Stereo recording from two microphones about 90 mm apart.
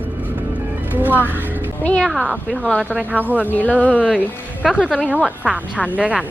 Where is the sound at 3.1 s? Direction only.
20° right (ahead or behind).